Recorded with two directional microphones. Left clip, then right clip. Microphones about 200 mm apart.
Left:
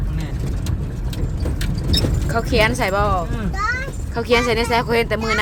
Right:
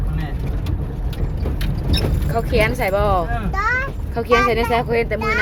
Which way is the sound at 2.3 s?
15° left (ahead or behind).